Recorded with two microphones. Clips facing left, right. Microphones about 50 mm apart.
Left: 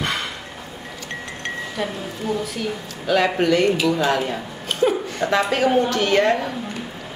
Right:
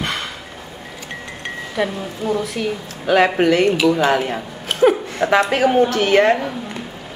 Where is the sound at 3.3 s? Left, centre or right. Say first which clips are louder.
Right 3 dB; centre.